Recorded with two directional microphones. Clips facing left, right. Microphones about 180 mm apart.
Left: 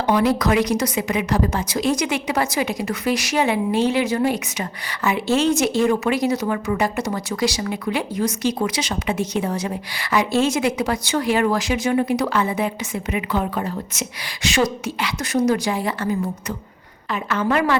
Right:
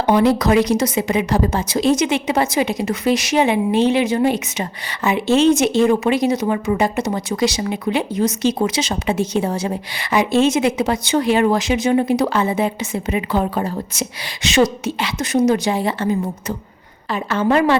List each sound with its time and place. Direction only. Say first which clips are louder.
0.0 s speech: right 3 dB; 25° right (ahead or behind)